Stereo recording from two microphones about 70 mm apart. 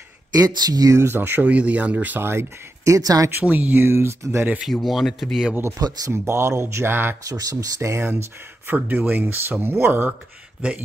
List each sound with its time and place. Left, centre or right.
0.4 s speech: right
0.9 s speech: right
1.5 s speech: centre
2.2 s speech: right
3.4 s speech: right
4.8 s speech: centre
5.8 s speech: right
6.1 s speech: right
7.2 s speech: right
8.7 s speech: right
10.6 s speech: centre